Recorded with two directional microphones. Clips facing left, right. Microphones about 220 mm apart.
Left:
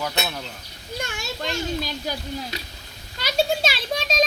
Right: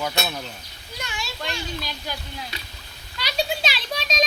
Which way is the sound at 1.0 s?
45° left (ahead or behind).